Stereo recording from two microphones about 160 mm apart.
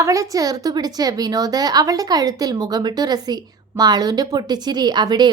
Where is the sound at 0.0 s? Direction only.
20° right (ahead or behind).